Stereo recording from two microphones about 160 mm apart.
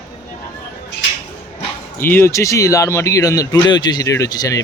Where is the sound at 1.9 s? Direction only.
15° left (ahead or behind).